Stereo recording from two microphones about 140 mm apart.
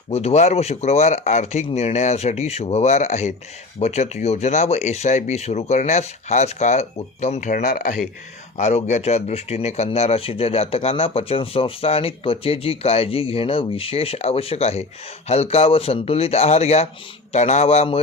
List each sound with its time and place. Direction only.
0.1 s speech: 50° left (ahead or behind)
7.5 s speech: 70° left (ahead or behind)
8.5 s speech: 55° left (ahead or behind)